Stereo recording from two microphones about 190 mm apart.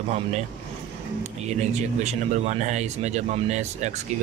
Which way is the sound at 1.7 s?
35° right (ahead or behind).